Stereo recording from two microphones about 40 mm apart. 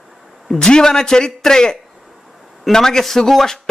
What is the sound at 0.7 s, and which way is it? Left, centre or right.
A man's voice, centre.